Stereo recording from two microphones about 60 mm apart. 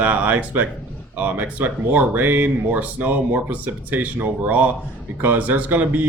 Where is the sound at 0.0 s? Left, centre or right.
Right.